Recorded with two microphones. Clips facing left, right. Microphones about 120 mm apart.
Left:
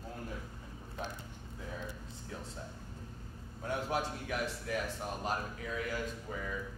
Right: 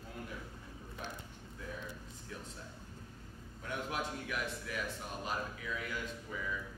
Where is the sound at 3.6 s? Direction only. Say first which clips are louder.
Left 4 dB; 35° left (ahead or behind).